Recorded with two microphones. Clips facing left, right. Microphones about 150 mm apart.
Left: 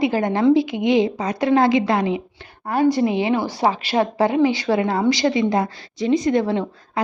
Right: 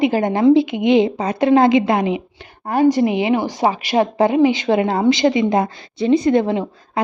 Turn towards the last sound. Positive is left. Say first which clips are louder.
# right 3 dB
turn(degrees=-25)  # may be behind; listen again after turning